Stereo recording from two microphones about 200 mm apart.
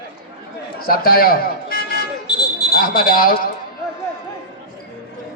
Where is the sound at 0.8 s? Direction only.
45° left (ahead or behind).